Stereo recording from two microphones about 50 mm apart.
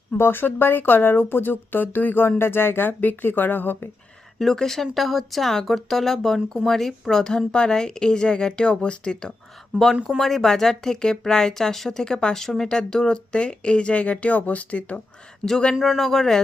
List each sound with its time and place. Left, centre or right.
0.2 s speech: left
2.4 s speech: left
4.4 s speech: centre
10.2 s speech: centre; by 15.0 s left
15.4 s speech: centre
15.7 s speech: centre
16.0 s speech: centre